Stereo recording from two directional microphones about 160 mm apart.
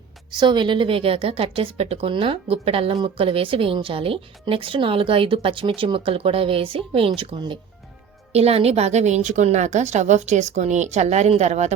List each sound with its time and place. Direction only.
0.3 s a woman's voice: 30° right (ahead or behind); by 11.7 s 45° right (ahead or behind)